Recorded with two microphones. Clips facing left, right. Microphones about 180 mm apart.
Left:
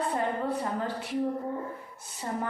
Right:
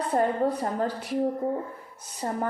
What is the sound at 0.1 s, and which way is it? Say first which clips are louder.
Speech: right 5 dB; 40° right (ahead or behind).